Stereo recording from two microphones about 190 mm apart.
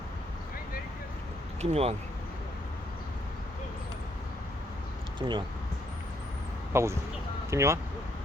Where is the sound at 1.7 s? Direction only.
35° right (ahead or behind).